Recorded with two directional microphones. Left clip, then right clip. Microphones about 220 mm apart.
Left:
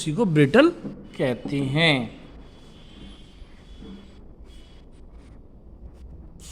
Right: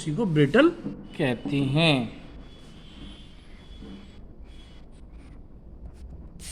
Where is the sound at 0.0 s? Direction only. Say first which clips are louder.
Left 3 dB; 40° left (ahead or behind).